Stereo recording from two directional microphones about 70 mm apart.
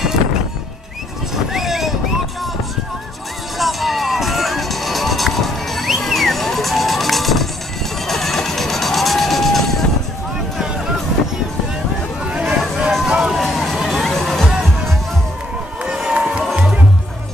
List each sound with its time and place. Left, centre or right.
1.3 s vehicle: centre
3.5 s music: centre
12.2 s vehicle: centre
13.1 s music: centre
15.8 s a sound: centre
16.5 s music: centre